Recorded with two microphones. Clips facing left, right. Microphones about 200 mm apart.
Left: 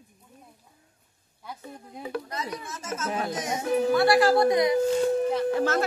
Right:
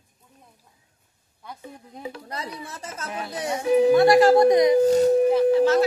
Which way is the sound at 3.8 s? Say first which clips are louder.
Right 6 dB; 20° right (ahead or behind).